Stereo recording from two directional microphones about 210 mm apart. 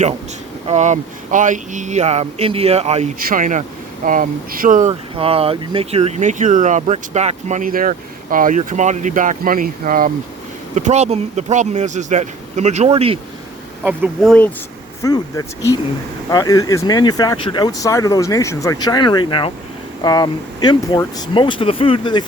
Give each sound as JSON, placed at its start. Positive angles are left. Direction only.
{"t": 0.7, "sound": "speech", "side_deg": -35}
{"t": 13.8, "sound": "speech", "side_deg": -5}
{"t": 15.0, "sound": "speech", "side_deg": 15}